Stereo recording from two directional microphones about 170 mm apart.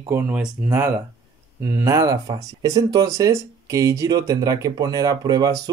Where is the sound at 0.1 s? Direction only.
10° right (ahead or behind).